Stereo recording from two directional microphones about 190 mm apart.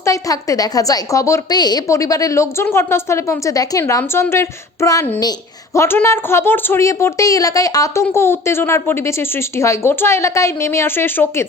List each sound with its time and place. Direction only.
0.0 s a woman's voice: 15° left (ahead or behind)